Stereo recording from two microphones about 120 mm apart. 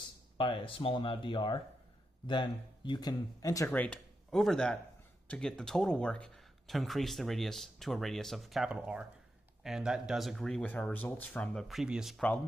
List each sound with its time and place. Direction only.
0.4 s speech: 45° left (ahead or behind); by 3.7 s 30° left (ahead or behind)
3.7 s speech: 10° left (ahead or behind)
10.6 s speech: 15° left (ahead or behind)
11.6 s speech: 5° right (ahead or behind)